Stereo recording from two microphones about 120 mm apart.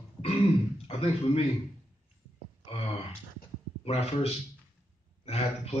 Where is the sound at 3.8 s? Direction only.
55° left (ahead or behind).